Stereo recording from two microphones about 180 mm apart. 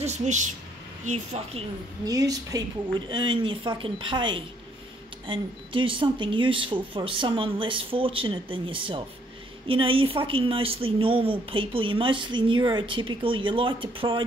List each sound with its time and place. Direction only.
0.0 s speech: 40° right (ahead or behind)
2.0 s a woman's voice: 20° right (ahead or behind)